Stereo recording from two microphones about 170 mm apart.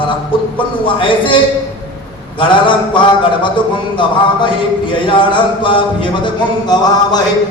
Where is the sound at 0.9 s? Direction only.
30° left (ahead or behind).